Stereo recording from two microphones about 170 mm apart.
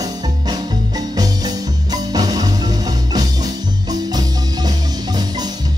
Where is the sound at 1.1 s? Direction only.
20° right (ahead or behind).